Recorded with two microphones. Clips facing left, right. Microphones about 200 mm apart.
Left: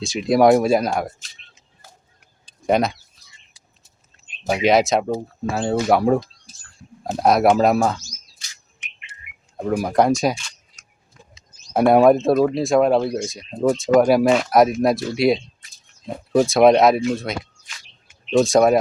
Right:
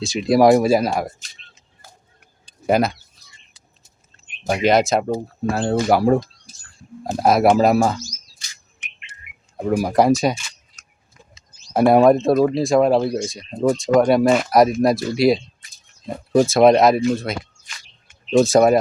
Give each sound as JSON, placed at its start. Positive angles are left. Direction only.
{"t": 0.0, "sound": "speech", "side_deg": 0}
{"t": 2.6, "sound": "speech", "side_deg": 0}
{"t": 4.4, "sound": "speech", "side_deg": 0}
{"t": 9.6, "sound": "speech", "side_deg": -5}
{"t": 11.7, "sound": "speech", "side_deg": 0}